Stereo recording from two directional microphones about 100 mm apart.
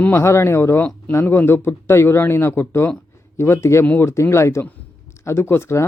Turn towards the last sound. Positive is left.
turn(degrees=25)  # may be behind; listen again after turning